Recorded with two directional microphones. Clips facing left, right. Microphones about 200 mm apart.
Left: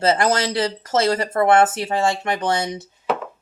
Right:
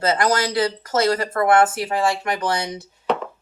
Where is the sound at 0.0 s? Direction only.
25° left (ahead or behind).